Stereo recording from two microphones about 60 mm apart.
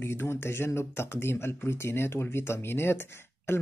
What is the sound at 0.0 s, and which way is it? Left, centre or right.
Speech, left.